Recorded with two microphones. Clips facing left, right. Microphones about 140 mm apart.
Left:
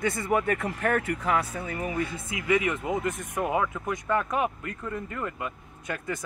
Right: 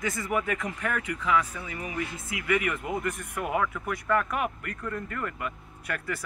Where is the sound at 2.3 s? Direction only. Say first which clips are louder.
Left 2 dB; 25° left (ahead or behind).